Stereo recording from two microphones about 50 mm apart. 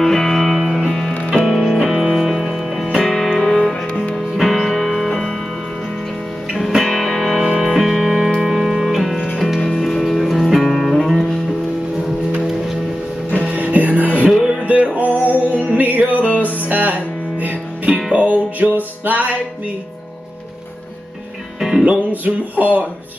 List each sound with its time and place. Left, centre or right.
0.0 s music: centre
6.8 s music: centre
7.4 s music: centre
13.4 s music: right
15.0 s music: left
15.4 s music: right
21.5 s music: centre
21.8 s music: right